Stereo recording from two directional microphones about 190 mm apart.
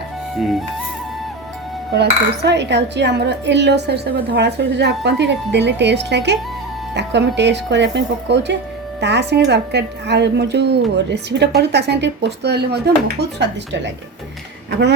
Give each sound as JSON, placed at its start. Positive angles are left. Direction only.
{"t": 0.3, "sound": "speech", "side_deg": 0}
{"t": 1.9, "sound": "a woman's voice", "side_deg": -60}